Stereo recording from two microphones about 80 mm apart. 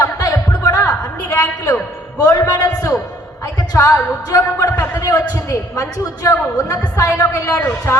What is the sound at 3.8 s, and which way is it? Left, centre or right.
Speech, left.